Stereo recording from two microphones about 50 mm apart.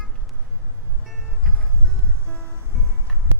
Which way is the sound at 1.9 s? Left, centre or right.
Right.